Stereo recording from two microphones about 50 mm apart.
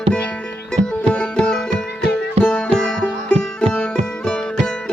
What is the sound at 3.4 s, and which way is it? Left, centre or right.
Music, centre.